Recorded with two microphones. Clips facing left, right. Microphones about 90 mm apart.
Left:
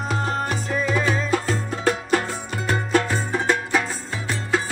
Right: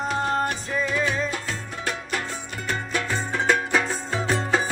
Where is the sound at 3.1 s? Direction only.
5° left (ahead or behind).